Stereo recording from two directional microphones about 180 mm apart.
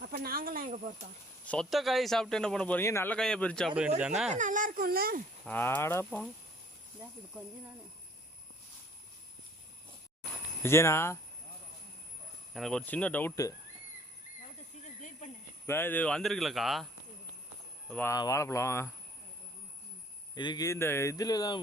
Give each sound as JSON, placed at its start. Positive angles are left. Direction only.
{"t": 0.0, "sound": "speech", "side_deg": -55}
{"t": 1.5, "sound": "a man's voice", "side_deg": 0}
{"t": 4.3, "sound": "speech", "side_deg": -45}
{"t": 5.5, "sound": "speech", "side_deg": 10}
{"t": 10.6, "sound": "speech", "side_deg": 15}
{"t": 12.5, "sound": "speech", "side_deg": 5}
{"t": 14.8, "sound": "a sound", "side_deg": 40}
{"t": 15.6, "sound": "a man's voice", "side_deg": 10}
{"t": 17.8, "sound": "speech", "side_deg": 10}
{"t": 20.3, "sound": "speech", "side_deg": 25}